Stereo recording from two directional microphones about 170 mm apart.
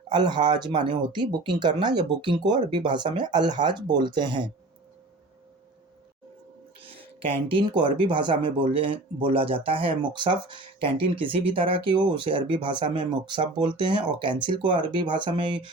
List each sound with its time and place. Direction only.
0.1 s speech: 25° right (ahead or behind)
6.7 s speech: 35° right (ahead or behind)